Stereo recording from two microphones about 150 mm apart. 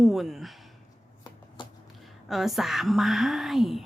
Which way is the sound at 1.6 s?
30° left (ahead or behind).